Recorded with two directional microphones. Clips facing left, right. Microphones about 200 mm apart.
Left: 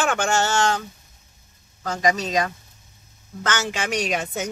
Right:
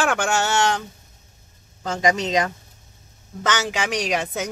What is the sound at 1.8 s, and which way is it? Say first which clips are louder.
A man's voice: right 1 dB; 20° right (ahead or behind).